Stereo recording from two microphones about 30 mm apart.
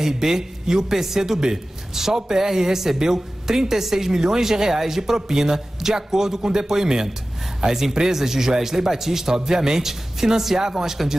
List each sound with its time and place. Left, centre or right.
0.2 s speech: centre